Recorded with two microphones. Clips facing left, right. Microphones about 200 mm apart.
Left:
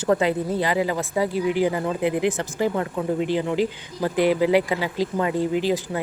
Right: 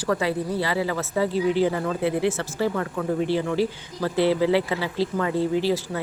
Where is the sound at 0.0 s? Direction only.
20° left (ahead or behind).